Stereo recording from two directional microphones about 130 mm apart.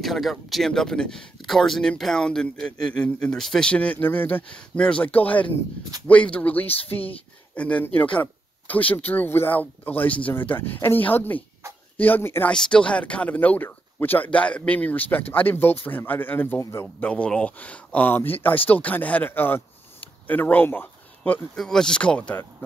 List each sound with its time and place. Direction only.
0.0 s speech: centre (ahead or behind)
6.7 s speech: 45° left (ahead or behind)
7.5 s speech: 10° left (ahead or behind)
12.5 s speech: 5° left (ahead or behind)